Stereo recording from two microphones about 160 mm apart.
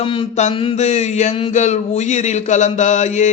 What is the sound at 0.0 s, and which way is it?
Mantra, 35° left (ahead or behind).